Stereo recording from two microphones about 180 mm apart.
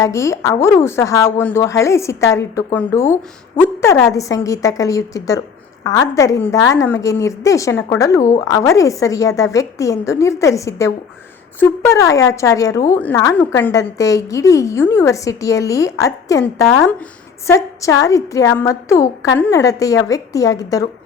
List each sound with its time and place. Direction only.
0.0 s a woman's voice: 15° left (ahead or behind)